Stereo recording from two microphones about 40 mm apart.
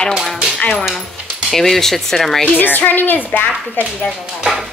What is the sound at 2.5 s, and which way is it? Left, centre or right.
A woman's voice, left.